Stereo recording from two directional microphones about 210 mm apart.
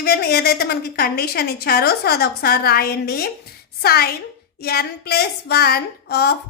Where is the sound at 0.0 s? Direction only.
50° left (ahead or behind).